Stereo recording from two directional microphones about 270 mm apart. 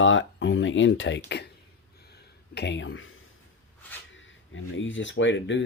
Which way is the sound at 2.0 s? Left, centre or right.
Left.